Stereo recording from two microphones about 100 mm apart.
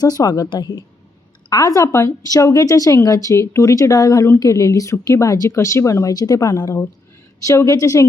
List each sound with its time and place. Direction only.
0.0 s a woman's voice: 40° left (ahead or behind)